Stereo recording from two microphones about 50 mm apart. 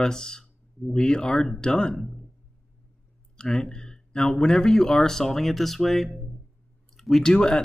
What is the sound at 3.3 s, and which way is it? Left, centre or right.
Speech, centre.